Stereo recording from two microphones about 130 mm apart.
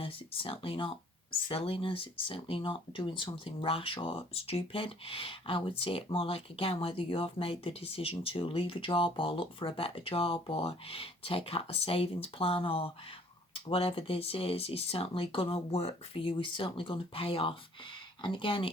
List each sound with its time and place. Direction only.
0.0 s speech: 45° left (ahead or behind)